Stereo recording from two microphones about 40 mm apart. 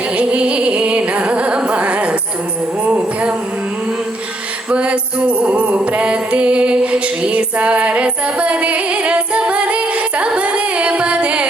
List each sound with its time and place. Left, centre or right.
0.2 s music: right
4.7 s music: right